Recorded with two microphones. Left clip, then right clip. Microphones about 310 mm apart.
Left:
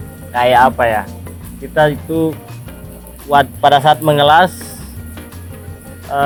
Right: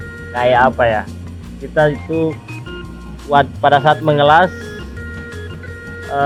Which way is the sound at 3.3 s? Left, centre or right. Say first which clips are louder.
Left 2 dB; left.